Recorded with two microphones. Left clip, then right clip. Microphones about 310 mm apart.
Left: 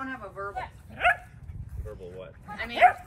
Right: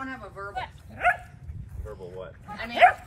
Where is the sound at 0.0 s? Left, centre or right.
Centre.